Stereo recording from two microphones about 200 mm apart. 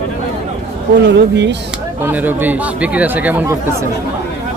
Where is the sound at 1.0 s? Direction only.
60° right (ahead or behind).